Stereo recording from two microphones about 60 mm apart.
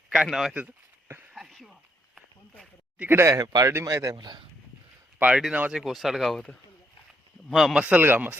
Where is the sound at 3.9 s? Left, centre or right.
Right.